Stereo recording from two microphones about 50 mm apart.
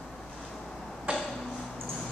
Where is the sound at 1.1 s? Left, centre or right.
Right.